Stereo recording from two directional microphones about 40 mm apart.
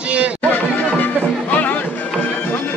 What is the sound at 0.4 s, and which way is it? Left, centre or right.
Music, left.